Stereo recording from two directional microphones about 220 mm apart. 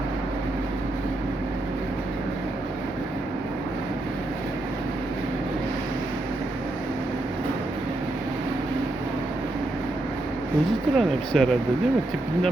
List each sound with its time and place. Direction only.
10.9 s speech: 5° left (ahead or behind)